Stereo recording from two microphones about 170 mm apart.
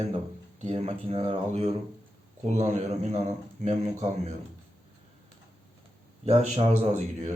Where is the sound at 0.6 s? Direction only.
40° right (ahead or behind).